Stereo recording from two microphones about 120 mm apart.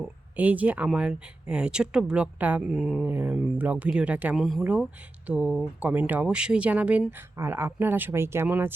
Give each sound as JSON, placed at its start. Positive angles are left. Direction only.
{"t": 0.0, "sound": "speech", "side_deg": -10}
{"t": 3.1, "sound": "speech", "side_deg": -15}
{"t": 4.4, "sound": "speech", "side_deg": 0}
{"t": 5.2, "sound": "speech", "side_deg": -10}